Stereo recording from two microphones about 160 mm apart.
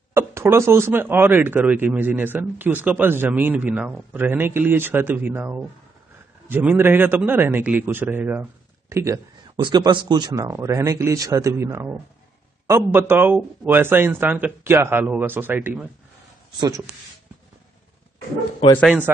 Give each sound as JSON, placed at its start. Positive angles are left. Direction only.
{"t": 0.1, "sound": "speech", "side_deg": -15}
{"t": 9.6, "sound": "speech", "side_deg": -30}
{"t": 16.5, "sound": "speech", "side_deg": -25}